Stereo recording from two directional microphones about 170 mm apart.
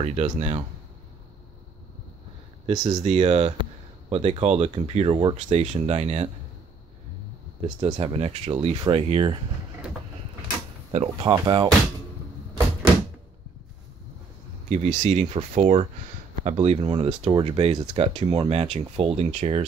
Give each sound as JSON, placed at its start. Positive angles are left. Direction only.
{"t": 0.0, "sound": "speech", "side_deg": -40}
{"t": 2.7, "sound": "speech", "side_deg": -20}
{"t": 3.0, "sound": "speech", "side_deg": -40}
{"t": 7.6, "sound": "speech", "side_deg": -25}
{"t": 10.9, "sound": "speech", "side_deg": -35}
{"t": 11.3, "sound": "speech", "side_deg": -25}
{"t": 14.7, "sound": "speech", "side_deg": -40}
{"t": 16.8, "sound": "speech", "side_deg": -30}